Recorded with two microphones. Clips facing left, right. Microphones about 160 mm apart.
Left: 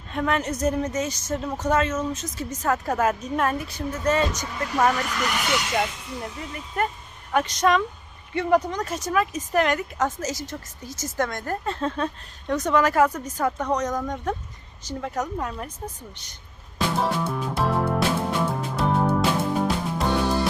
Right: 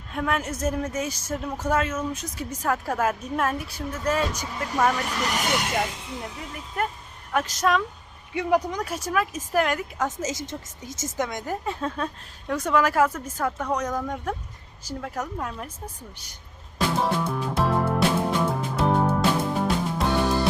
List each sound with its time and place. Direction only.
0.1 s a woman's voice: 5° right (ahead or behind)
5.1 s speech: 35° right (ahead or behind); by 5.7 s 50° right (ahead or behind)
6.2 s a woman's voice: centre (ahead or behind)
10.2 s a woman's voice: 25° right (ahead or behind); by 15.7 s centre (ahead or behind)
16.7 s music: centre (ahead or behind)